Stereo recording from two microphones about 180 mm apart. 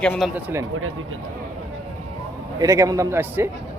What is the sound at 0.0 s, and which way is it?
Speech, 5° left (ahead or behind).